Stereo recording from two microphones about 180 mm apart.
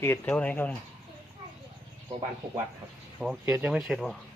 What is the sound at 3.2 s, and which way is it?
Speech, 10° right (ahead or behind).